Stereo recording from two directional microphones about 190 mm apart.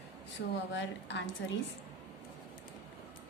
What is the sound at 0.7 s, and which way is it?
Speech, 75° left (ahead or behind).